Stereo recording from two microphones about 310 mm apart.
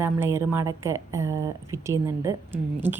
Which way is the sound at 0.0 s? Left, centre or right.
Centre.